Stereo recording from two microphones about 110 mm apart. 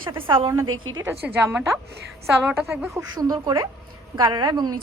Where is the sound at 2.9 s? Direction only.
35° right (ahead or behind).